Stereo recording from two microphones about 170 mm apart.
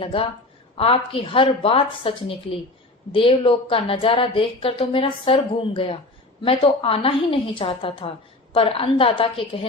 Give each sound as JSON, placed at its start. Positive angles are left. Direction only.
{"t": 0.0, "sound": "a woman's voice", "side_deg": 30}